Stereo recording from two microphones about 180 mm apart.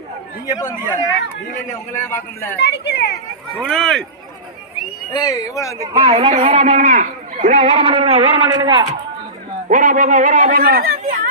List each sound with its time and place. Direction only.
0.4 s a man's voice: 20° left (ahead or behind)
2.6 s speech: 70° left (ahead or behind)
3.6 s speech: 5° left (ahead or behind)
5.1 s a man's voice: 20° left (ahead or behind)
6.0 s speech: 30° right (ahead or behind)
9.6 s a man's voice: 45° right (ahead or behind)